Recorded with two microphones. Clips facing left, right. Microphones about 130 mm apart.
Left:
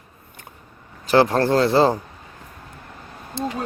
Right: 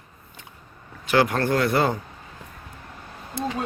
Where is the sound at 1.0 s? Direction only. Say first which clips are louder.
Left 4 dB; 30° left (ahead or behind).